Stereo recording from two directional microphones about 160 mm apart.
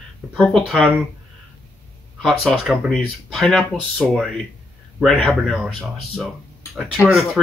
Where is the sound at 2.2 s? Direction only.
Centre (ahead or behind).